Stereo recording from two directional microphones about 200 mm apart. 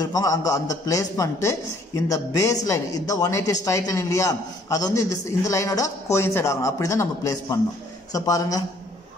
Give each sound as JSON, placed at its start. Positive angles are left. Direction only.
{"t": 0.0, "sound": "speech", "side_deg": 15}